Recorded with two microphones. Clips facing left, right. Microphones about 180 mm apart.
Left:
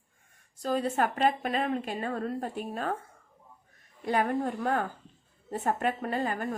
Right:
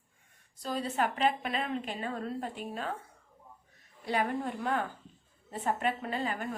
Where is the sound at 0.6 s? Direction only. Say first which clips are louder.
Left 4 dB; 50° left (ahead or behind).